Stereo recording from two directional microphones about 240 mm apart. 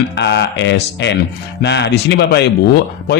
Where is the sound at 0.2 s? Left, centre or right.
Left.